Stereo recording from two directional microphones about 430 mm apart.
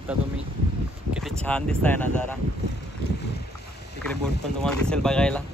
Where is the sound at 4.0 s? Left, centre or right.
Centre.